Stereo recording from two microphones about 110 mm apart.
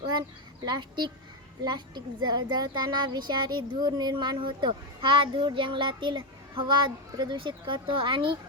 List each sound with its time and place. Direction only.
0.6 s speech: 40° right (ahead or behind)